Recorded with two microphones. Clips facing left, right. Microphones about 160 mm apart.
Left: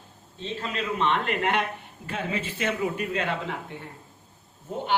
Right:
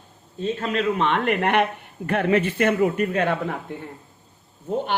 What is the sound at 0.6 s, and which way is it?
A man's voice, 55° right (ahead or behind).